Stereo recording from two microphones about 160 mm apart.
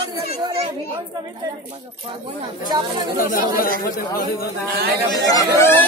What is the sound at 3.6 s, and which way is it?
Speech, 65° left (ahead or behind).